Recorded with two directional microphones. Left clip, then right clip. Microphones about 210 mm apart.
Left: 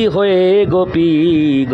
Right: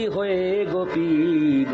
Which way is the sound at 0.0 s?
50° left (ahead or behind).